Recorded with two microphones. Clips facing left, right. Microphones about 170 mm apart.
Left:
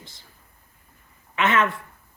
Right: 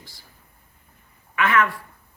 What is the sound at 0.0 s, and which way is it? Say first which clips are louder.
Speech: left 1 dB; 20° left (ahead or behind).